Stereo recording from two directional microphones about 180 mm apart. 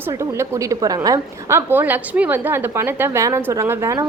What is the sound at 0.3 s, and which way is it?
A woman's voice, 20° right (ahead or behind).